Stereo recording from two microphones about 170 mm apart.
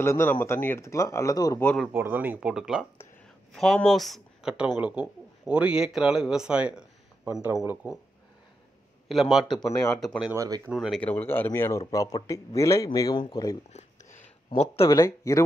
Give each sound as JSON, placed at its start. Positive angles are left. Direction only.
{"t": 0.0, "sound": "speech", "side_deg": 15}
{"t": 1.6, "sound": "speech", "side_deg": 5}
{"t": 1.9, "sound": "speech", "side_deg": -10}
{"t": 9.1, "sound": "speech", "side_deg": 0}
{"t": 10.3, "sound": "speech", "side_deg": -20}
{"t": 10.7, "sound": "speech", "side_deg": -5}
{"t": 11.0, "sound": "speech", "side_deg": 10}
{"t": 13.7, "sound": "a sound", "side_deg": 45}
{"t": 14.9, "sound": "speech", "side_deg": 20}